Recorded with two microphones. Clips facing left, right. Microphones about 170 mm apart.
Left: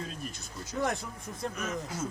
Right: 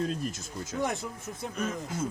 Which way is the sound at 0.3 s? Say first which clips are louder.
Right 5 dB; 45° right (ahead or behind).